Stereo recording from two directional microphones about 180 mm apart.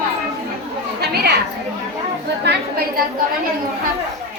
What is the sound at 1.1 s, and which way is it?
Chatter, 65° right (ahead or behind).